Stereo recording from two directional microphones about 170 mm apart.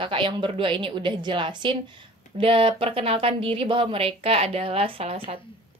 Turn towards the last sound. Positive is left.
turn(degrees=-30)  # may be behind; listen again after turning